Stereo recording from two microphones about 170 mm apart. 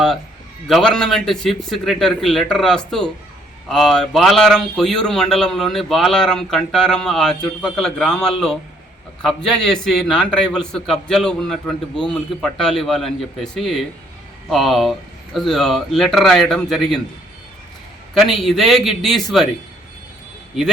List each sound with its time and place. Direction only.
0.7 s a man's voice: 5° left (ahead or behind)
18.1 s a man's voice: centre (ahead or behind)